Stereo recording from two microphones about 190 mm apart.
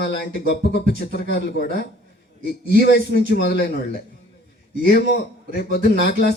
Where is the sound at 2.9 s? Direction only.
60° left (ahead or behind).